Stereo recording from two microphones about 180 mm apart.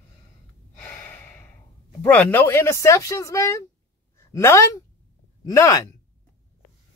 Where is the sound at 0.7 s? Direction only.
10° left (ahead or behind).